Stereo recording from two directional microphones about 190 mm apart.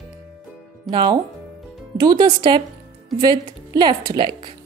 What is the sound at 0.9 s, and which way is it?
A woman's voice, 25° right (ahead or behind).